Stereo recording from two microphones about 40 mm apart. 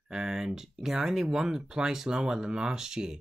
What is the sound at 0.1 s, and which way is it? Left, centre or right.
Speech, centre.